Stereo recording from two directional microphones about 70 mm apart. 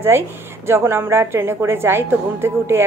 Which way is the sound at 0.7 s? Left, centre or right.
Right.